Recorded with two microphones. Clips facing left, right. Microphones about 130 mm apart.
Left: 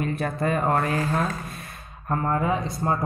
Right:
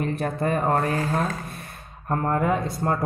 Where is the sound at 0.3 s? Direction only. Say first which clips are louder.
Even; 30° right (ahead or behind).